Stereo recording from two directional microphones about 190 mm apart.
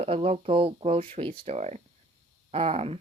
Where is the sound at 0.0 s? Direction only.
30° right (ahead or behind).